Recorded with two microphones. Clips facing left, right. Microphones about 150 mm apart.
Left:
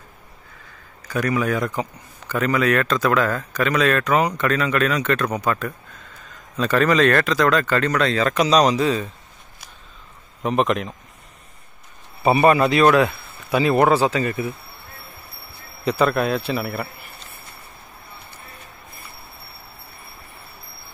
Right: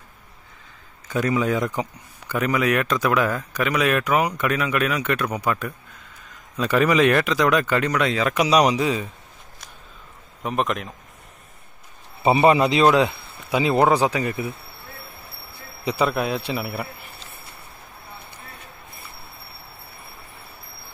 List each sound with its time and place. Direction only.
1.0 s a man's voice: 20° right (ahead or behind)
10.4 s speech: centre (ahead or behind)
12.2 s a man's voice: 20° right (ahead or behind)
15.8 s a man's voice: 10° right (ahead or behind)